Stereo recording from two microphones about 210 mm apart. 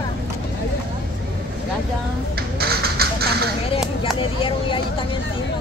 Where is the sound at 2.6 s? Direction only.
50° right (ahead or behind).